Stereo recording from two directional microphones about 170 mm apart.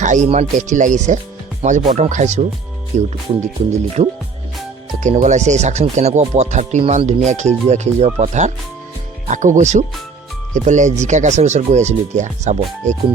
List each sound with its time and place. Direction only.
0.0 s speech: 45° right (ahead or behind)